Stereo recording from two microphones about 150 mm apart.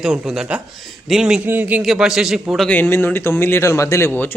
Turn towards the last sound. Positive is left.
turn(degrees=15)  # may be behind; listen again after turning